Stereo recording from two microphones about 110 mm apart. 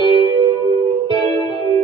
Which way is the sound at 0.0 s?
50° right (ahead or behind).